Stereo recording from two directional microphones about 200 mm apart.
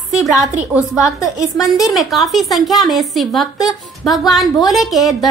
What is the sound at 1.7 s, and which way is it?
A woman's voice, centre (ahead or behind).